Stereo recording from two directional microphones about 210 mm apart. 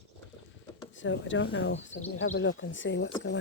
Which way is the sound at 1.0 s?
60° left (ahead or behind).